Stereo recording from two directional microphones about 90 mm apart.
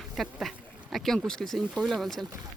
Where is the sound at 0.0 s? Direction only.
Centre (ahead or behind).